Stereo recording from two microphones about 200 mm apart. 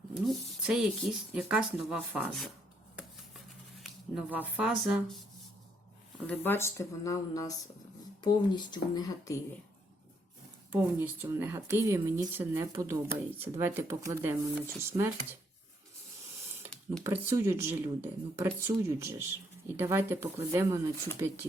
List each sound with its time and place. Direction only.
0.3 s speech: centre (ahead or behind)
2.9 s scissors: centre (ahead or behind)
6.2 s speech: 10° left (ahead or behind)
10.7 s speech: 10° right (ahead or behind)
17.0 s speech: 15° right (ahead or behind)